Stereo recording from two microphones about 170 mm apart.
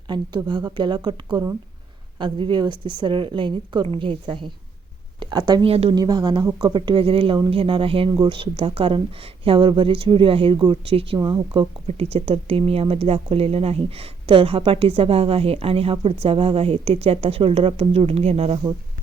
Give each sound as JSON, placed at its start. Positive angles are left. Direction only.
{"t": 0.1, "sound": "a woman's voice", "side_deg": -25}
{"t": 5.7, "sound": "speech", "side_deg": -35}
{"t": 6.0, "sound": "a woman's voice", "side_deg": -25}